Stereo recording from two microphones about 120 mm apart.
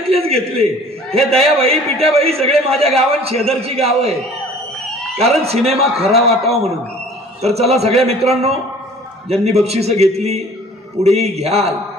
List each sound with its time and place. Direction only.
0.0 s a man's voice: 55° right (ahead or behind)
5.2 s a man's voice: 60° right (ahead or behind)